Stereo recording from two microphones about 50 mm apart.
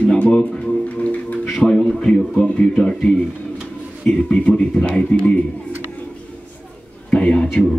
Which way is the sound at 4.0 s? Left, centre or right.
Left.